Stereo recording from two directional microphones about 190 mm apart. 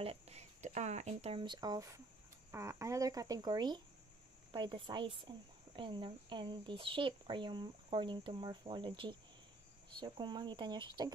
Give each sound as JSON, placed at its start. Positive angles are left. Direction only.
{"t": 0.0, "sound": "speech", "side_deg": -30}